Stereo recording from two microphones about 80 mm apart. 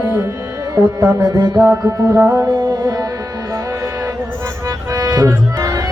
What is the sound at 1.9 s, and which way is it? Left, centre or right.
Music, right.